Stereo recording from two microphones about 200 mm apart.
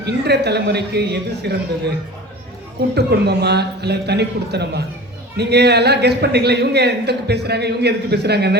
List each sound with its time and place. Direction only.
0.0 s a man's voice: 55° right (ahead or behind)
2.9 s a man's voice: 55° right (ahead or behind)